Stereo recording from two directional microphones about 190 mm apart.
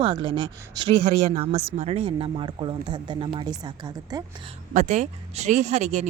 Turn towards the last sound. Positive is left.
turn(degrees=-35)  # may be behind; listen again after turning